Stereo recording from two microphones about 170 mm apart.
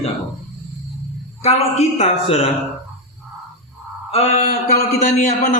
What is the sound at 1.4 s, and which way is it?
A man's voice, 40° left (ahead or behind).